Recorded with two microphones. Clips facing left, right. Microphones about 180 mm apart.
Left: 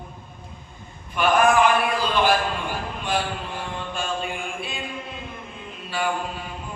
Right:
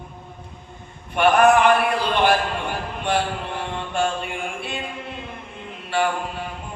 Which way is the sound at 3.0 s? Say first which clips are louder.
Right 4 dB; 65° right (ahead or behind).